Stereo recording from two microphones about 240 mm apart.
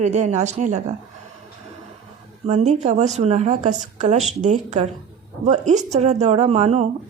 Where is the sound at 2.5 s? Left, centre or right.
Right.